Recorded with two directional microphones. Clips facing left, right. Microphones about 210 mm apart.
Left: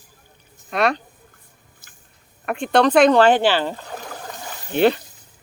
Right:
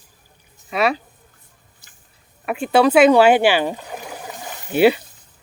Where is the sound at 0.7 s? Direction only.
5° right (ahead or behind).